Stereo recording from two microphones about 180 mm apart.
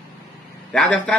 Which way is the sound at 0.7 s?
5° left (ahead or behind).